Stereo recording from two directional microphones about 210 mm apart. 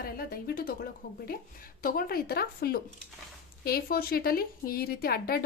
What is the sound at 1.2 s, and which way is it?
A woman's voice, 45° left (ahead or behind).